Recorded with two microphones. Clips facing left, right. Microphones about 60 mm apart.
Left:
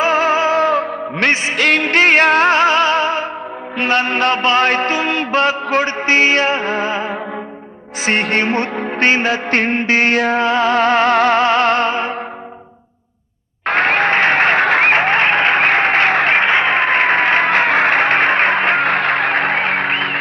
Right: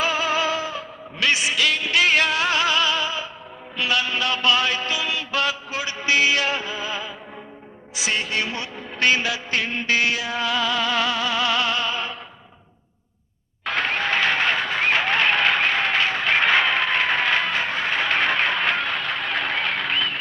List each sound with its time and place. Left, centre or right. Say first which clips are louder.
0.0 s music: left 8 dB; left
0.6 s music: left 15 dB; left
1.3 s music: left 5 dB; left
5.6 s music: left 9 dB; left
9.0 s music: left 6 dB; left
13.7 s applause: left 9 dB; left
16.4 s a sound: left 5 dB; left